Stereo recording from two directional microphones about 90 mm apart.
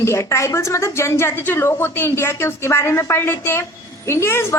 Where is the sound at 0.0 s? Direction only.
30° left (ahead or behind).